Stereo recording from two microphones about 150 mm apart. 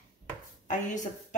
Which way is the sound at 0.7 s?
55° left (ahead or behind).